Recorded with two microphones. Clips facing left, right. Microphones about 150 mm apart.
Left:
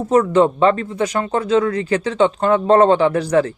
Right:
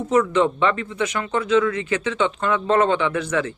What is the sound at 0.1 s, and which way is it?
Speech, 35° left (ahead or behind).